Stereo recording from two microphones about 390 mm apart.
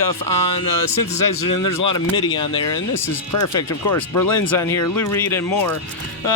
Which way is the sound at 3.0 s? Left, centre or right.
Left.